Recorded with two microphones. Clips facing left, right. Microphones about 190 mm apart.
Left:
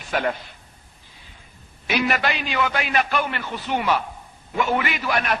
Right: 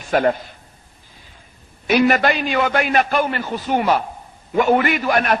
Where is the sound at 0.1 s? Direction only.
45° right (ahead or behind).